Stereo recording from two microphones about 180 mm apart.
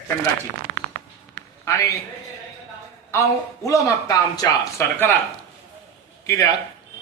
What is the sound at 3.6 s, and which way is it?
Speech, 20° left (ahead or behind).